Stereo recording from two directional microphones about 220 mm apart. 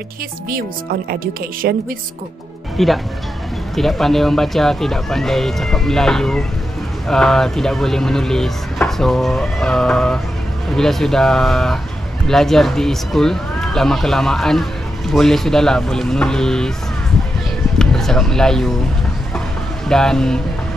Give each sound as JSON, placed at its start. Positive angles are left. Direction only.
{"t": 1.2, "sound": "speech", "side_deg": -40}
{"t": 2.8, "sound": "speech", "side_deg": 0}
{"t": 17.7, "sound": "speech", "side_deg": 0}
{"t": 19.9, "sound": "speech", "side_deg": 5}